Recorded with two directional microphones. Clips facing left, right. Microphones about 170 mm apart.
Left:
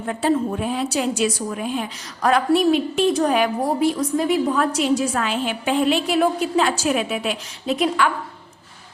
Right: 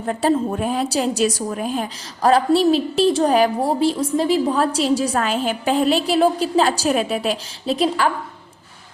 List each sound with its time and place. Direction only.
0.0 s a woman's voice: 35° right (ahead or behind)